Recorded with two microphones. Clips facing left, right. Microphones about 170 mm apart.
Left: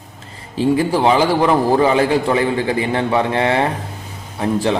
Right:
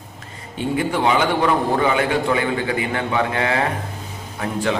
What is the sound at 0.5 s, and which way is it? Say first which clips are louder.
A man's voice: left 6 dB; 30° left (ahead or behind).